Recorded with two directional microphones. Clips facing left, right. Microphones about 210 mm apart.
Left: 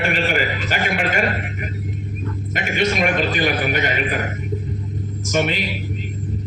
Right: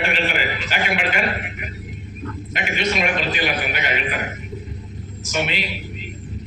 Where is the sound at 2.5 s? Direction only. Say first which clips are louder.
Left 3 dB; 45° left (ahead or behind).